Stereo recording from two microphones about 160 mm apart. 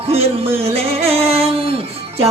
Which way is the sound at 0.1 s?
40° right (ahead or behind).